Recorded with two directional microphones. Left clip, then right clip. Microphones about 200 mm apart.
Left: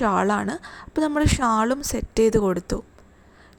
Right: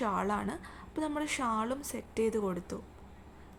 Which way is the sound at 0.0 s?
35° left (ahead or behind).